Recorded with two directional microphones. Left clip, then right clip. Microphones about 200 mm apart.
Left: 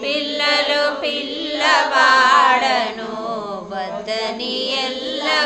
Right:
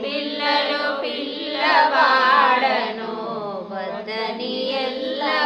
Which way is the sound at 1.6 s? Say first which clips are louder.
Left 1 dB; 40° left (ahead or behind).